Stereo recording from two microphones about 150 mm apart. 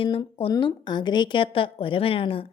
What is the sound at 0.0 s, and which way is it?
A woman's voice, 35° left (ahead or behind).